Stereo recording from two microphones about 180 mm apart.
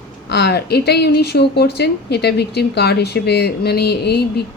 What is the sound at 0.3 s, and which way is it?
A woman's voice, 65° left (ahead or behind).